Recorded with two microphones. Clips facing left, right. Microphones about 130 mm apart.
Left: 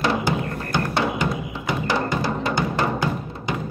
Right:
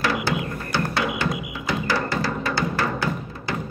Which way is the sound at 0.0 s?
25° left (ahead or behind).